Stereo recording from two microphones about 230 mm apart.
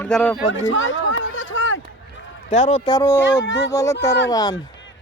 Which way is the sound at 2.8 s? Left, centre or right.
Centre.